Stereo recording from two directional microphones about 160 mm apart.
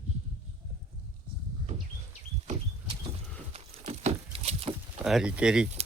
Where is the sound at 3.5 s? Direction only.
40° right (ahead or behind).